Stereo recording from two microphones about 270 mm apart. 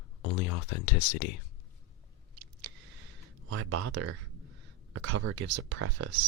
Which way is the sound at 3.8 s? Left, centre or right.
Right.